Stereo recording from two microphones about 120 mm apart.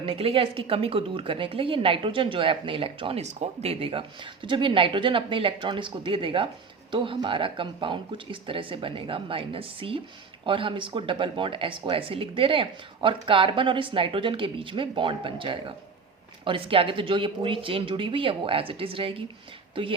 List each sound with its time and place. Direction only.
0.0 s speech: 50° right (ahead or behind)
3.2 s speech: 65° right (ahead or behind)